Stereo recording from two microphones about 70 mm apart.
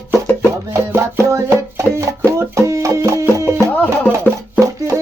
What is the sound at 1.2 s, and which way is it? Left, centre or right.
Music, right.